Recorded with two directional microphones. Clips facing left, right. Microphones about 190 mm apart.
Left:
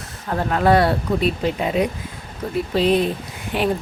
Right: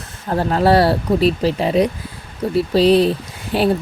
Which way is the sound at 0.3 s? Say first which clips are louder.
Right 2 dB; 35° right (ahead or behind).